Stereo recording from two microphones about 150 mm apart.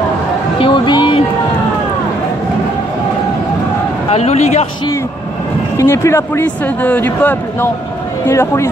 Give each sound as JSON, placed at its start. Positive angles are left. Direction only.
{"t": 0.6, "sound": "speech", "side_deg": 35}
{"t": 4.1, "sound": "speech", "side_deg": 45}
{"t": 5.8, "sound": "a man's voice", "side_deg": 20}